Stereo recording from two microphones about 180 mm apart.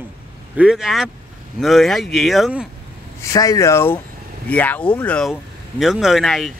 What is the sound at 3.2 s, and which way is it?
Speech, 20° left (ahead or behind).